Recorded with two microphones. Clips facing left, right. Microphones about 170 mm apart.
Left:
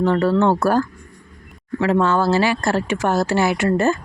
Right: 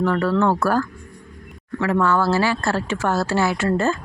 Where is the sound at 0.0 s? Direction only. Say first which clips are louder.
Left 2 dB; 25° left (ahead or behind).